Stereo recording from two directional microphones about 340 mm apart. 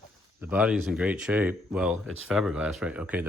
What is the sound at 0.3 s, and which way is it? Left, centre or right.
Speech, centre.